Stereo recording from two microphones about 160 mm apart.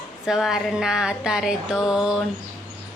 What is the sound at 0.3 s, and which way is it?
A woman's voice, centre (ahead or behind).